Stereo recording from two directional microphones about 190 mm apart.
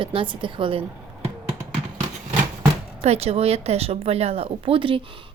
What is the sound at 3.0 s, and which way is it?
Speech, 35° right (ahead or behind).